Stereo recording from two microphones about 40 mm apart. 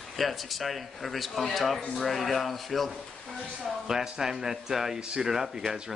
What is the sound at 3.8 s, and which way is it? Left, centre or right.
Speech, centre.